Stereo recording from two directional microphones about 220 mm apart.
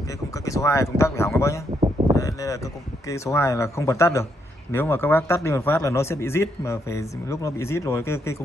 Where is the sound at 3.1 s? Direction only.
15° left (ahead or behind).